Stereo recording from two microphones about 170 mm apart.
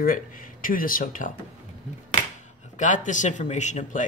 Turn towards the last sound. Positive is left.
turn(degrees=45)  # may be behind; listen again after turning